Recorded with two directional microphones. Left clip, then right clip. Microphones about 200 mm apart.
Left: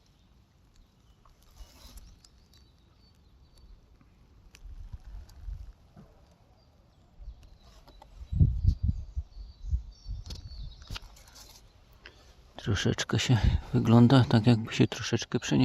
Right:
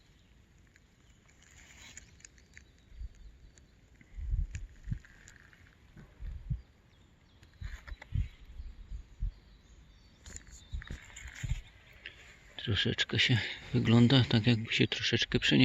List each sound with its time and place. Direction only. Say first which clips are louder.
12.5 s speech: even; 35° left (ahead or behind)
15.1 s speech: right 2 dB; 10° left (ahead or behind)